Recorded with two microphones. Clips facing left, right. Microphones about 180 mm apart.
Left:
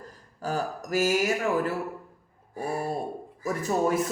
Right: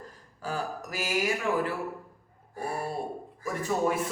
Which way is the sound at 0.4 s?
45° left (ahead or behind).